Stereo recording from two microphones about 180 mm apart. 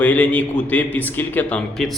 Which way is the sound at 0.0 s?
10° left (ahead or behind).